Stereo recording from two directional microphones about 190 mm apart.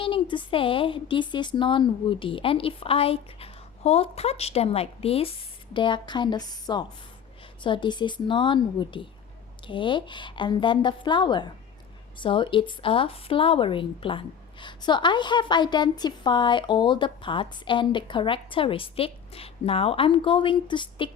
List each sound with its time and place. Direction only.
0.0 s speech: 25° left (ahead or behind)